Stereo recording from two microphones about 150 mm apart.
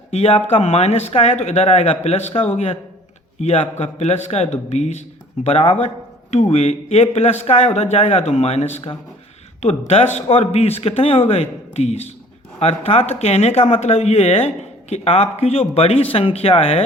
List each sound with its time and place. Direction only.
0.1 s speech: 40° left (ahead or behind)